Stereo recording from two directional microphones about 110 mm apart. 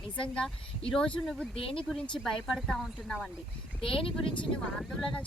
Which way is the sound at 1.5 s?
55° left (ahead or behind).